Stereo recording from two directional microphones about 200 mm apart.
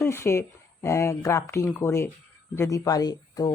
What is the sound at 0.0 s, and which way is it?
Speech, 15° left (ahead or behind).